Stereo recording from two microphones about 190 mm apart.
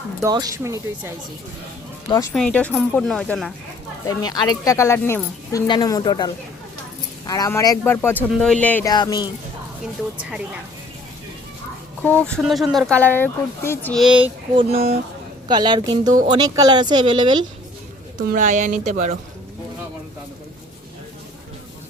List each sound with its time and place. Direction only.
0.2 s speech: 20° right (ahead or behind)
2.3 s speech: 5° left (ahead or behind)
4.2 s speech: 20° left (ahead or behind)
8.9 s speech: 20° left (ahead or behind)
10.2 s speech: 5° right (ahead or behind)
12.0 s speech: 5° left (ahead or behind)
14.0 s speech: 5° right (ahead or behind)
14.5 s speech: 25° right (ahead or behind)
18.2 s speech: 45° right (ahead or behind)